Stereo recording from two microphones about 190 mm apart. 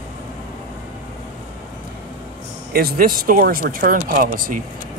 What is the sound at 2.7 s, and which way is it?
Speech, 50° right (ahead or behind).